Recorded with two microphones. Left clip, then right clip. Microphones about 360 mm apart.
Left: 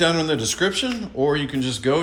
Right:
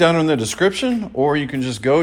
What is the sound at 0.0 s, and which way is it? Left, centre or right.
Speech, centre.